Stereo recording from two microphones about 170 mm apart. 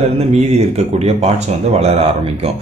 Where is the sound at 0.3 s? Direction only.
40° right (ahead or behind).